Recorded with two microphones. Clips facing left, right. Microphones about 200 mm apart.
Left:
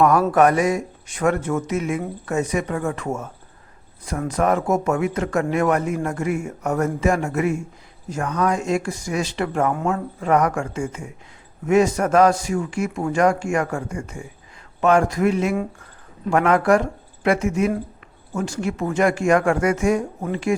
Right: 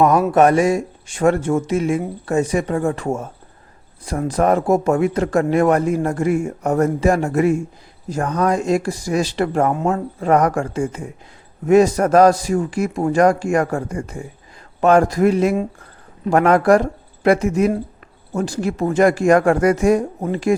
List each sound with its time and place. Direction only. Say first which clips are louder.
0.0 s speech: right 2 dB; 20° right (ahead or behind); by 20.6 s 35° right (ahead or behind)